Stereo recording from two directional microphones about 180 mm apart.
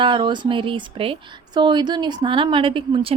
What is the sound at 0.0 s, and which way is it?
Speech, 25° right (ahead or behind).